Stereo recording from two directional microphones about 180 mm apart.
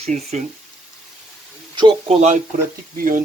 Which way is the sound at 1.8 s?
25° right (ahead or behind).